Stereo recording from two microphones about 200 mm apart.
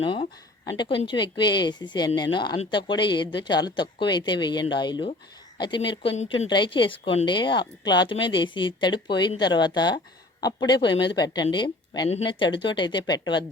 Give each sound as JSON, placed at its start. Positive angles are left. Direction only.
{"t": 0.1, "sound": "speech", "side_deg": 25}
{"t": 10.9, "sound": "a woman's voice", "side_deg": 60}
{"t": 11.4, "sound": "speech", "side_deg": 25}